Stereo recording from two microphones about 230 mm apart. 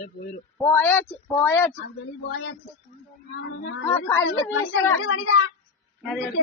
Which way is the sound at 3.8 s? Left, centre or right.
Centre.